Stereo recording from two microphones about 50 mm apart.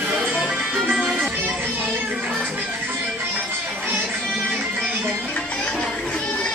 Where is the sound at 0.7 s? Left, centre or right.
Centre.